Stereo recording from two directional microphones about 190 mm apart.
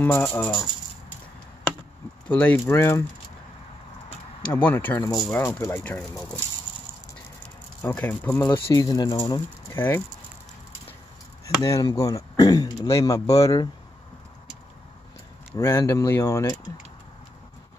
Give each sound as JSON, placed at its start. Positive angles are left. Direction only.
{"t": 0.0, "sound": "speech", "side_deg": 10}
{"t": 2.2, "sound": "speech", "side_deg": 10}
{"t": 4.6, "sound": "speech", "side_deg": 10}
{"t": 7.8, "sound": "speech", "side_deg": 10}
{"t": 8.5, "sound": "speech", "side_deg": 20}
{"t": 9.8, "sound": "speech", "side_deg": 10}
{"t": 11.6, "sound": "speech", "side_deg": 15}
{"t": 15.5, "sound": "speech", "side_deg": 15}